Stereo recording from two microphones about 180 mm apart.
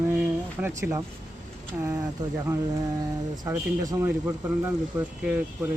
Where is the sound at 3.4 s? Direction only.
15° right (ahead or behind).